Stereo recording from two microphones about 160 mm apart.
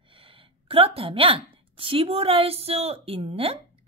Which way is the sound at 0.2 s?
35° right (ahead or behind).